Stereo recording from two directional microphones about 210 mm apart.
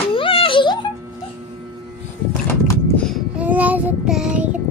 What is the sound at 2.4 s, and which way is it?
Child singing, 10° left (ahead or behind).